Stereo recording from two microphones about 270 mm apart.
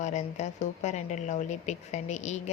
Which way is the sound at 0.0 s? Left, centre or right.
Left.